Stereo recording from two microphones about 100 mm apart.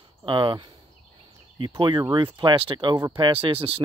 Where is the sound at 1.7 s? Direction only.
45° right (ahead or behind).